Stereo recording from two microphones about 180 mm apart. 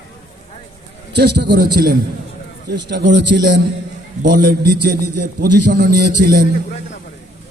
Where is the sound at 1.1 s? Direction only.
65° right (ahead or behind).